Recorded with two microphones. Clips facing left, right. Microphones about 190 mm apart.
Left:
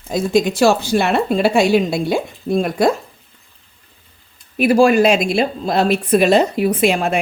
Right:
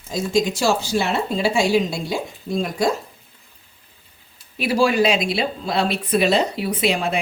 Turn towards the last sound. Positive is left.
turn(degrees=50)  # may be behind; listen again after turning